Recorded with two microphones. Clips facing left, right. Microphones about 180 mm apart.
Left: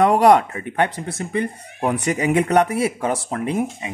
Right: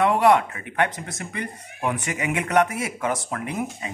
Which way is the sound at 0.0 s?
40° left (ahead or behind).